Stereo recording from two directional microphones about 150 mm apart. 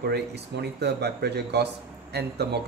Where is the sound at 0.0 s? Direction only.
90° right.